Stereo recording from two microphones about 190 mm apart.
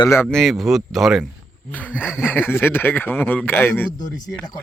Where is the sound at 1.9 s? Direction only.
5° right (ahead or behind).